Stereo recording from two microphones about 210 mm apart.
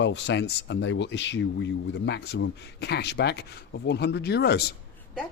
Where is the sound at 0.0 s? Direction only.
60° left (ahead or behind).